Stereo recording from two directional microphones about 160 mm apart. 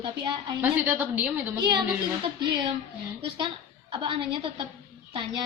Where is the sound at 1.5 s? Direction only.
30° right (ahead or behind).